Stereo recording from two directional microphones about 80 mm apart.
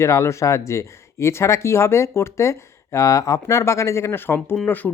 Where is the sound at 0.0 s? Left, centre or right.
Left.